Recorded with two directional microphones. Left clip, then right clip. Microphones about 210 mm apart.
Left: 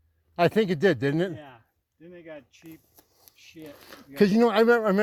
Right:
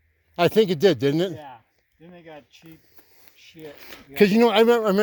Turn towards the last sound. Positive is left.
turn(degrees=-15)  # may be behind; listen again after turning